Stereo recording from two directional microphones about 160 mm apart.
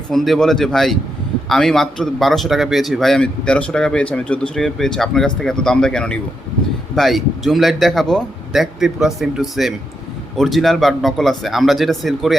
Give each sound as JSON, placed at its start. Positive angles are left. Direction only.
{"t": 0.1, "sound": "a man's voice", "side_deg": 0}